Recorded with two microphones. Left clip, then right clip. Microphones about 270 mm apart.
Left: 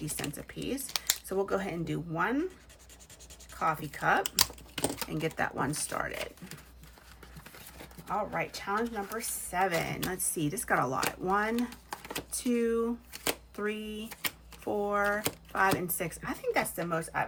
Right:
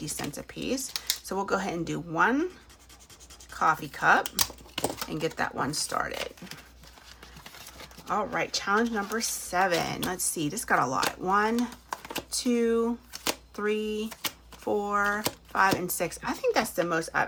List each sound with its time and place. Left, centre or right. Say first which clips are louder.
0.6 s speech: right 3 dB; centre
3.6 s speech: right 6 dB; centre
8.0 s speech: right 4 dB; centre